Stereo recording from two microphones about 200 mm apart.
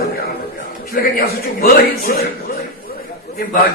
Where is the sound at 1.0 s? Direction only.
45° left (ahead or behind).